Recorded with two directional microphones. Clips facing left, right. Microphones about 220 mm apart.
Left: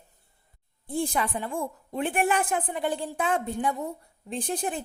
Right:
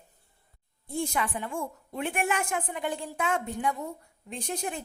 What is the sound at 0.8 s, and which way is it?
A woman's voice, 35° left (ahead or behind).